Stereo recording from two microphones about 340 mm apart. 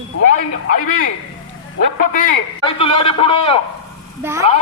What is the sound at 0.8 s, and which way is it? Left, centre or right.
Speech, left.